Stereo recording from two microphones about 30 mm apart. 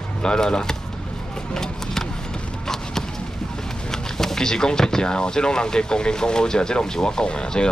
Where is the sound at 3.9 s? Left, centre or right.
Centre.